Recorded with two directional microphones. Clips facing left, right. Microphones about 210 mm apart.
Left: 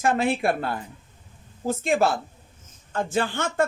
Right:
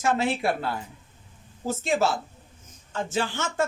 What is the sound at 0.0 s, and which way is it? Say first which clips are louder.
A woman's voice: left 2 dB; 55° left (ahead or behind).